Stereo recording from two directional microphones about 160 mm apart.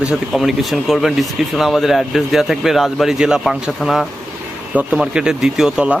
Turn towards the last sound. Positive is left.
turn(degrees=-5)  # may be behind; listen again after turning